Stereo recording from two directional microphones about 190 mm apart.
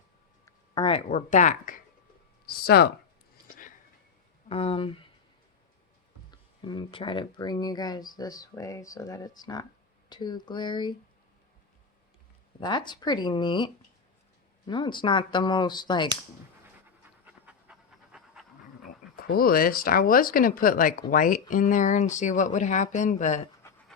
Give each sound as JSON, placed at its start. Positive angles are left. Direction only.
{"t": 0.4, "sound": "speech", "side_deg": 25}
{"t": 2.5, "sound": "speech", "side_deg": 55}
{"t": 4.4, "sound": "speech", "side_deg": 30}
{"t": 6.3, "sound": "speech", "side_deg": 25}
{"t": 12.5, "sound": "speech", "side_deg": 25}
{"t": 14.7, "sound": "speech", "side_deg": 25}
{"t": 17.2, "sound": "pant", "side_deg": -5}
{"t": 19.1, "sound": "speech", "side_deg": 50}
{"t": 23.6, "sound": "dog", "side_deg": 15}